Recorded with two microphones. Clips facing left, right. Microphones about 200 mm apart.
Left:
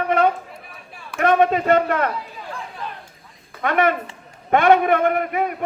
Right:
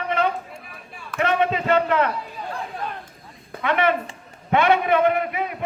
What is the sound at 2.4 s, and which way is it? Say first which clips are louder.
Chatter: right 2 dB; 40° right (ahead or behind).